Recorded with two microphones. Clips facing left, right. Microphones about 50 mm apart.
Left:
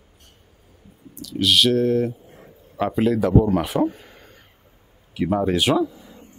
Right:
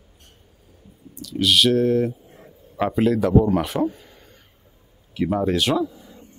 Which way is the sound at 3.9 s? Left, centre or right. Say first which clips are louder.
Even; left.